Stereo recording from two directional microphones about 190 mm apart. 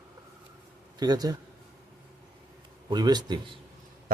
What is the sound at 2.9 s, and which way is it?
Speech, 20° right (ahead or behind).